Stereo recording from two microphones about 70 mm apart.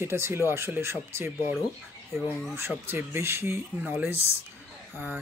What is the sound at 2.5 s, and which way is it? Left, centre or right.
Speech, right.